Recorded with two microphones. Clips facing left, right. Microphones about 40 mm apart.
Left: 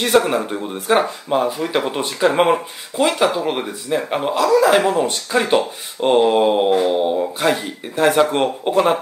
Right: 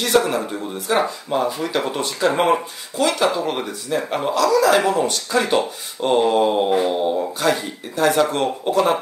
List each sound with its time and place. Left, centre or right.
0.0 s speech: left